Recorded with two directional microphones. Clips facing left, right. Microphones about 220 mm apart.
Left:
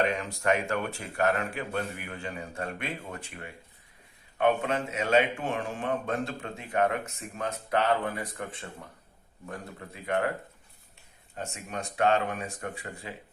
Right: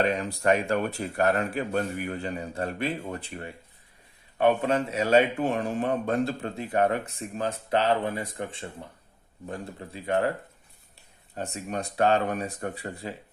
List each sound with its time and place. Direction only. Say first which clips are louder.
0.0 s speech: right 3 dB; 35° right (ahead or behind)
11.3 s speech: right 4 dB; 35° right (ahead or behind)